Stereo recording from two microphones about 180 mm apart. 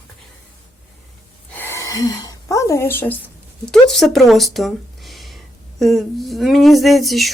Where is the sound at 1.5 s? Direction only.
15° left (ahead or behind).